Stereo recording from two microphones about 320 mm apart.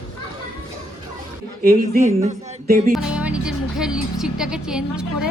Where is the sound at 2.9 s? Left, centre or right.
Centre.